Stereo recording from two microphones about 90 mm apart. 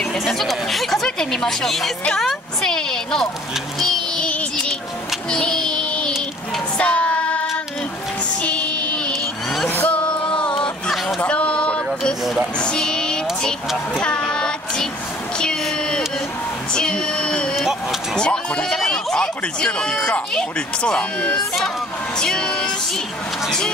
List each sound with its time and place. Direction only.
0.0 s speech: 5° left (ahead or behind)
3.8 s child singing: 10° left (ahead or behind)
8.4 s music: 15° left (ahead or behind)
9.7 s a sound: 20° left (ahead or behind)
12.5 s vehicle: 10° left (ahead or behind)
14.0 s child singing: 10° left (ahead or behind)
16.7 s a sound: 10° left (ahead or behind)
18.1 s speech: 10° left (ahead or behind)